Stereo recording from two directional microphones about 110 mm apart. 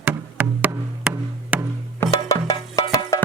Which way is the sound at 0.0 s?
15° right (ahead or behind).